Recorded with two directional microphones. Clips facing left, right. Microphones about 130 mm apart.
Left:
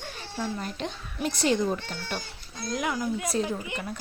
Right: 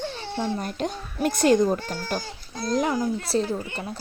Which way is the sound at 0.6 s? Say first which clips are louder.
Right 5 dB; 45° right (ahead or behind).